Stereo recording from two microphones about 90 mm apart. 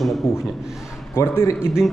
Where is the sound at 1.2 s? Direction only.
30° left (ahead or behind).